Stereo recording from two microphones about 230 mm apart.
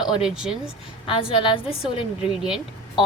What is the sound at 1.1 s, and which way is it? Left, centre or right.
Speech, left.